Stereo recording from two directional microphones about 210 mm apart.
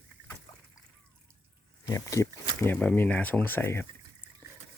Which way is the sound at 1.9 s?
15° left (ahead or behind).